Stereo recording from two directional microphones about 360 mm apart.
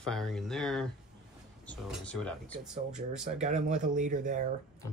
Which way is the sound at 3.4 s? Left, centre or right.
Centre.